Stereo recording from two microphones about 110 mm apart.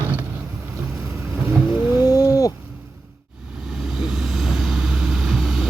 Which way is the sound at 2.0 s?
35° left (ahead or behind).